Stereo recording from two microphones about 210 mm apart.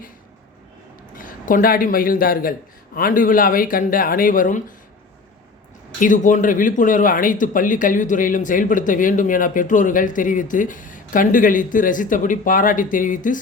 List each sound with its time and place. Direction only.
1.1 s speech: 40° left (ahead or behind)
6.0 s speech: 40° left (ahead or behind)